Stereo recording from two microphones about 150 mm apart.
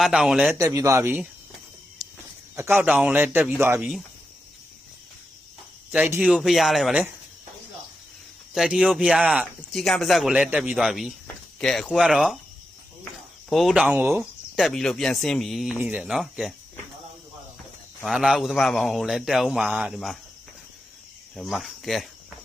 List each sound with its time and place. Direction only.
0.0 s speech: 5° right (ahead or behind)
0.6 s speech: 20° right (ahead or behind)
2.6 s speech: 15° right (ahead or behind)
3.8 s speech: 5° right (ahead or behind)
5.9 s speech: 10° right (ahead or behind)
8.5 s speech: 5° right (ahead or behind)
13.5 s speech: centre (ahead or behind)
18.0 s speech: centre (ahead or behind)
21.3 s speech: centre (ahead or behind)